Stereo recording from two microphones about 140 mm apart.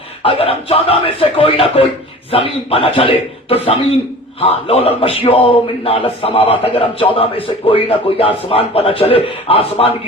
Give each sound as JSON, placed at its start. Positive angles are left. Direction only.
{"t": 0.2, "sound": "a man's voice", "side_deg": 40}